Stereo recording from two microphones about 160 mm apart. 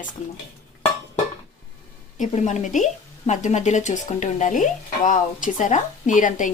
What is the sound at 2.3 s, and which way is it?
A woman's voice, 45° left (ahead or behind).